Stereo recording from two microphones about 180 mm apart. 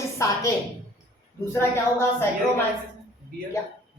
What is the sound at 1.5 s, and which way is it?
Speech, 15° left (ahead or behind).